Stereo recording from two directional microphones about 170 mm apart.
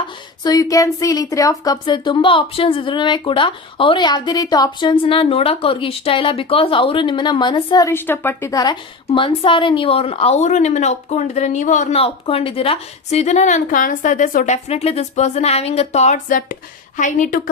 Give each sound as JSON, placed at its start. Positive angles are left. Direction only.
{"t": 0.4, "sound": "a woman's voice", "side_deg": 20}